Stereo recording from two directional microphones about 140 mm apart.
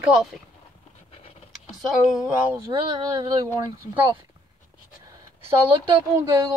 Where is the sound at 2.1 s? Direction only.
10° right (ahead or behind).